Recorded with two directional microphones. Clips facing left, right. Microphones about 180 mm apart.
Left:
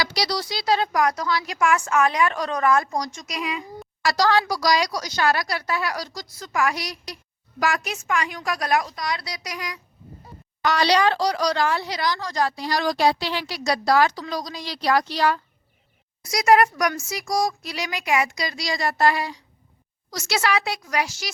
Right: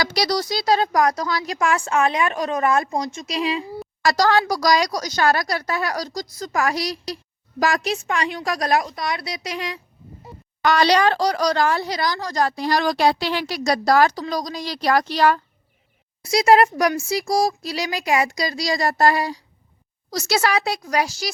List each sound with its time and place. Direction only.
0.0 s speech: 50° right (ahead or behind); by 3.7 s 30° right (ahead or behind)
4.0 s speech: 45° right (ahead or behind)
9.0 s speech: 25° right (ahead or behind)
10.6 s speech: 55° right (ahead or behind)
16.2 s speech: 30° right (ahead or behind)